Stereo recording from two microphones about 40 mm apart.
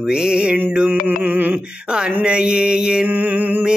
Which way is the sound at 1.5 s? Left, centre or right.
Right.